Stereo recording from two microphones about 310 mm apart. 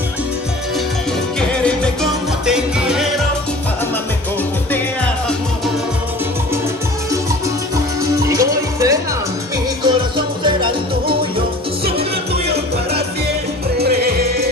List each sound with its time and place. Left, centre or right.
1.4 s music: centre
7.7 s music: centre
13.7 s music: right